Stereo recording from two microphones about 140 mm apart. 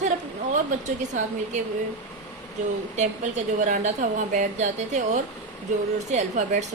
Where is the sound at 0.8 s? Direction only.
60° right (ahead or behind).